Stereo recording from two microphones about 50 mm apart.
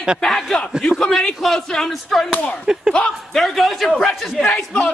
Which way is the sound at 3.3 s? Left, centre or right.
Centre.